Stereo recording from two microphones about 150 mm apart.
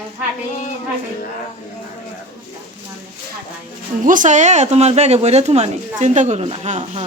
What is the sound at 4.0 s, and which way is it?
Speech, 60° right (ahead or behind).